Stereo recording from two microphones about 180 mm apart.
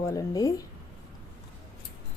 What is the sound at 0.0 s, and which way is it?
Speech, 20° left (ahead or behind).